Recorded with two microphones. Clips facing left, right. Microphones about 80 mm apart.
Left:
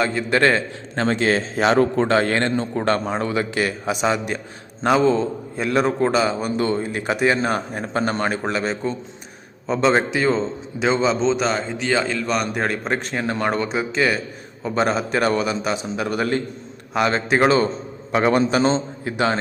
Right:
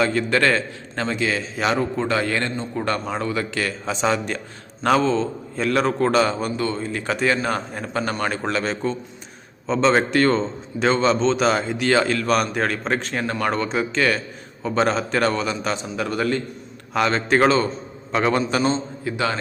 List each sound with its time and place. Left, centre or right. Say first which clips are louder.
0.0 s a man's voice: right 1 dB; centre
0.3 s a man's voice: left 4 dB; left
1.0 s a man's voice: left 4 dB; left
3.2 s a man's voice: left 3 dB; left; by 6.5 s centre
6.6 s a man's voice: left 3 dB; left
8.4 s a man's voice: even; centre
13.2 s a man's voice: left 2 dB; centre
13.7 s a man's voice: even; centre
18.6 s a man's voice: left 2 dB; left